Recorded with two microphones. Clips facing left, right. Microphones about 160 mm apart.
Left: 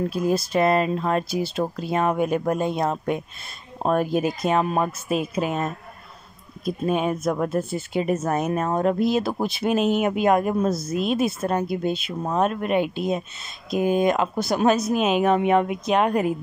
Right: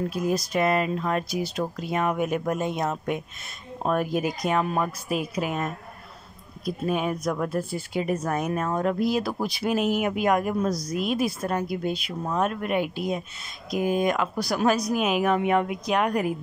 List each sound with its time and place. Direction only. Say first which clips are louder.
0.1 s speech: left 3 dB; 30° left (ahead or behind)